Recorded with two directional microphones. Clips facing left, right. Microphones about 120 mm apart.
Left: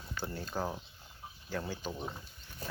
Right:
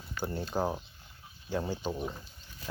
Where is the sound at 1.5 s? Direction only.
20° right (ahead or behind).